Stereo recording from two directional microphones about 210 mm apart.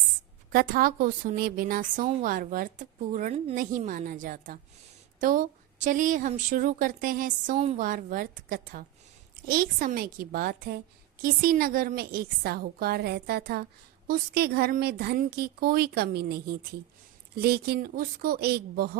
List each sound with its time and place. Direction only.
0.5 s a woman's voice: 45° right (ahead or behind)